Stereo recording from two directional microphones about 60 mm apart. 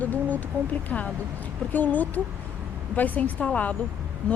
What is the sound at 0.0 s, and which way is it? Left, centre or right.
A woman's voice, left.